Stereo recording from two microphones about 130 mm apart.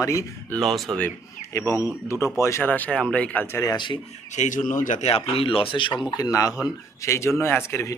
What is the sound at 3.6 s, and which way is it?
Speech, 35° left (ahead or behind).